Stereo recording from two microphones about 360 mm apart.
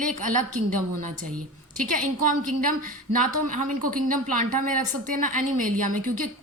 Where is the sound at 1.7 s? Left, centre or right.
Right.